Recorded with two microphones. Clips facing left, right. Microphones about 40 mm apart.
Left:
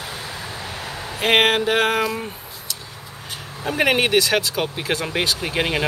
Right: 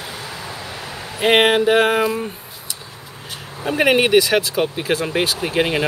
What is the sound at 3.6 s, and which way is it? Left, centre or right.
Speech, centre.